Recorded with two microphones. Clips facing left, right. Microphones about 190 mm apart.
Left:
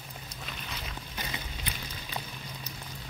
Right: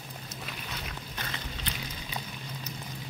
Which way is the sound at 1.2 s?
15° left (ahead or behind).